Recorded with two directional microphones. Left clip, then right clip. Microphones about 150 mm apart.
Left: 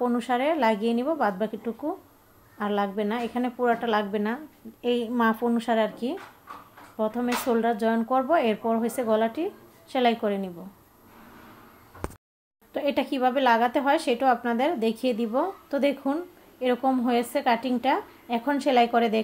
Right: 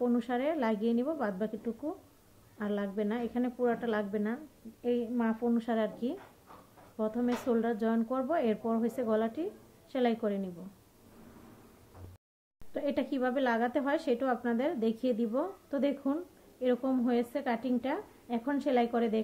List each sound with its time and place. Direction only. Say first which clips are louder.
0.0 s a woman's voice: left 7 dB; 5° left (ahead or behind)
4.8 s a woman's voice: left 8 dB; 35° left (ahead or behind)
5.4 s a woman's voice: left 7 dB; 15° left (ahead or behind)
12.7 s a woman's voice: left 7 dB; 5° left (ahead or behind)